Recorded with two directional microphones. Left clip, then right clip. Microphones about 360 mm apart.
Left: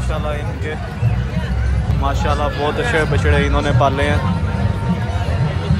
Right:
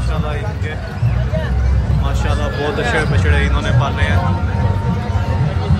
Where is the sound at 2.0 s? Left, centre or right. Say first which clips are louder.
Left 5 dB; centre.